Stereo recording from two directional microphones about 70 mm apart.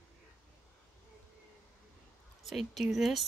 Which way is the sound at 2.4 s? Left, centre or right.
Centre.